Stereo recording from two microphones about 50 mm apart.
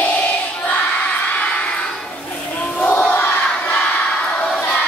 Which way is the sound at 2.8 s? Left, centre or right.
Left.